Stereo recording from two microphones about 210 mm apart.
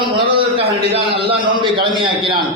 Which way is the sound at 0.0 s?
25° right (ahead or behind).